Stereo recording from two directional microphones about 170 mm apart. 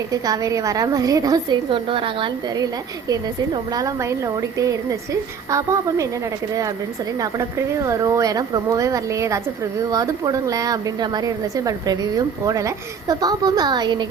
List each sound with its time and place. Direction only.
0.1 s a woman's voice: 20° right (ahead or behind)
7.2 s a woman's voice: 20° right (ahead or behind)